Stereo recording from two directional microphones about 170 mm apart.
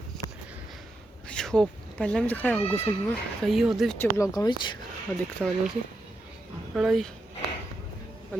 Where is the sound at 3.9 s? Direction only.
15° left (ahead or behind).